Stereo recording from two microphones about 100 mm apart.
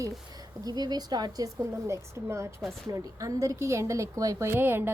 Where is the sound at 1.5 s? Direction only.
30° right (ahead or behind).